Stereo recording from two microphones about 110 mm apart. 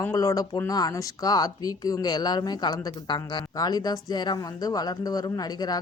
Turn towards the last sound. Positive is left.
turn(degrees=35)  # may be behind; listen again after turning